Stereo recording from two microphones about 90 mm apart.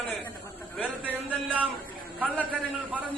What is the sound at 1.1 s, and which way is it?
Speech, 15° right (ahead or behind).